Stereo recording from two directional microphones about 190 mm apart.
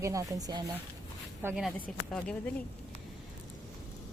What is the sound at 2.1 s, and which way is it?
Speech, 5° left (ahead or behind).